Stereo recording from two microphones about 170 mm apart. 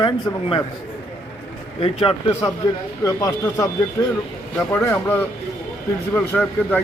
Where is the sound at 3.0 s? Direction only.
20° left (ahead or behind).